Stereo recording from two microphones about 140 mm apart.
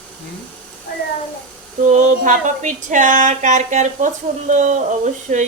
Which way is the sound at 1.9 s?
60° right (ahead or behind).